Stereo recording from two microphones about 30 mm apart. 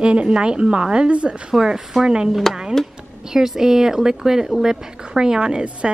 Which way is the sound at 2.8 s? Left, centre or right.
Centre.